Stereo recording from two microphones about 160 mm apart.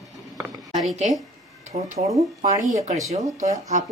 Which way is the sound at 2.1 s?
20° right (ahead or behind).